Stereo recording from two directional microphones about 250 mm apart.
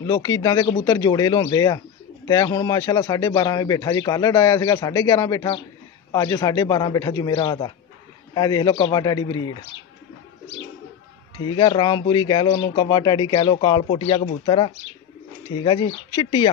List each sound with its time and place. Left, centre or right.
0.0 s speech: centre
11.4 s speech: centre